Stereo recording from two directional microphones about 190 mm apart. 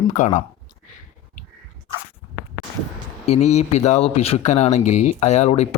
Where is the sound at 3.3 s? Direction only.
35° left (ahead or behind).